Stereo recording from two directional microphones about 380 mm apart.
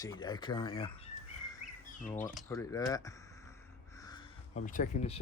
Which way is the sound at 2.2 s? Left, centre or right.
Centre.